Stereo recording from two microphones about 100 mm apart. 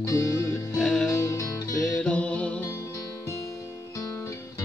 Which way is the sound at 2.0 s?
10° left (ahead or behind).